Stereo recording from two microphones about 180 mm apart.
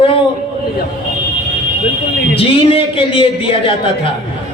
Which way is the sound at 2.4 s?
30° left (ahead or behind).